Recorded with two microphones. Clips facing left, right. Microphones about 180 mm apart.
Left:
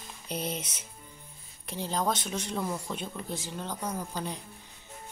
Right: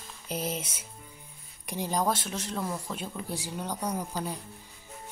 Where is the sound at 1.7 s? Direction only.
15° right (ahead or behind).